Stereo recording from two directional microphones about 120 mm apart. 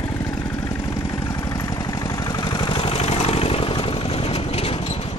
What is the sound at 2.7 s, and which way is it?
Vehicle, 55° left (ahead or behind).